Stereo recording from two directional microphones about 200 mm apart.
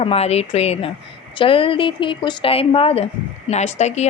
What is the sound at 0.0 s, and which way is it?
A woman's voice, 30° left (ahead or behind).